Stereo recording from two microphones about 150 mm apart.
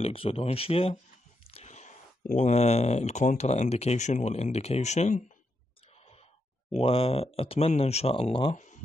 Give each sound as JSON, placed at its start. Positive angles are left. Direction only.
{"t": 0.0, "sound": "speech", "side_deg": 40}
{"t": 6.7, "sound": "speech", "side_deg": 40}